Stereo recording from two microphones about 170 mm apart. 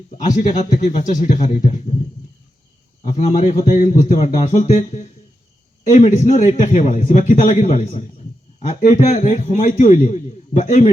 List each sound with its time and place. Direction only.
0.2 s a man's voice: 45° left (ahead or behind)
3.1 s a man's voice: 45° left (ahead or behind)